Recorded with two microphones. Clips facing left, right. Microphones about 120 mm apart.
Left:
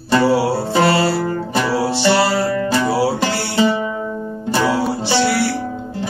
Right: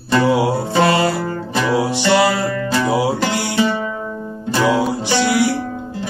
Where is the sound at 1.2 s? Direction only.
10° left (ahead or behind).